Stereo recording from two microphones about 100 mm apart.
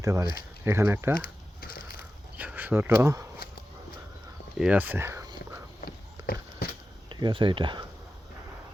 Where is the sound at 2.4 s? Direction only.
15° right (ahead or behind).